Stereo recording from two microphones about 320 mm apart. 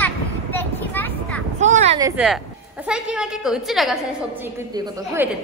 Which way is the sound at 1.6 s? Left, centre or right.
Right.